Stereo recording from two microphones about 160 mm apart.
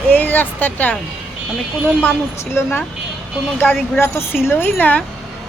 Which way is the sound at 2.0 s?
10° left (ahead or behind).